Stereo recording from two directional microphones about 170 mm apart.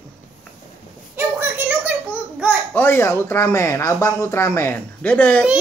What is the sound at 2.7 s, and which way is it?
Speech, 15° left (ahead or behind).